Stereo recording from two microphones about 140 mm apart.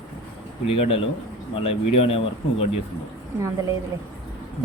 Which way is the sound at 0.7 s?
45° left (ahead or behind).